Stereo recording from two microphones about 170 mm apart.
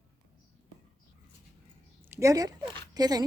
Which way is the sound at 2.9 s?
25° right (ahead or behind).